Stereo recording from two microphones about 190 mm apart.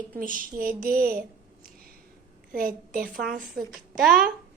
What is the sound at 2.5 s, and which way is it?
Speech, 45° right (ahead or behind).